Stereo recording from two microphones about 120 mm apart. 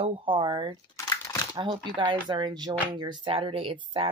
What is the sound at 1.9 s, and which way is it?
Speech, 40° right (ahead or behind).